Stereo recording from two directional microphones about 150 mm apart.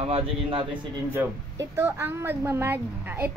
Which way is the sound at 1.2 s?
15° right (ahead or behind).